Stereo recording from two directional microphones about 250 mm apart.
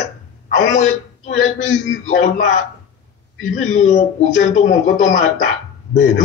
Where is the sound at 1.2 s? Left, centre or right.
Left.